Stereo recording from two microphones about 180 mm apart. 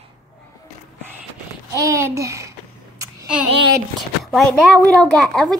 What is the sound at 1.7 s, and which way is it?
Speech, 15° right (ahead or behind).